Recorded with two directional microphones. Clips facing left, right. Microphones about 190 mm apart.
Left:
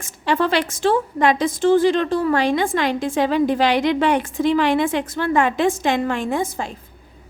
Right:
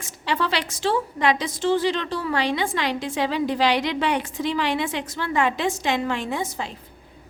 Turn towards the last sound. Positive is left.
turn(degrees=50)  # may be behind; listen again after turning